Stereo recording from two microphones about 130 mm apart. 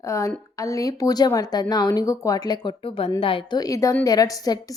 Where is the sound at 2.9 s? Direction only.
45° left (ahead or behind); by 4.6 s 30° left (ahead or behind).